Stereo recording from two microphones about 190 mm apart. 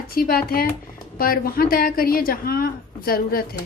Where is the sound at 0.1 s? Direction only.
50° left (ahead or behind).